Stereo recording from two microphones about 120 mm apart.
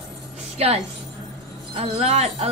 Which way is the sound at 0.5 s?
60° right (ahead or behind).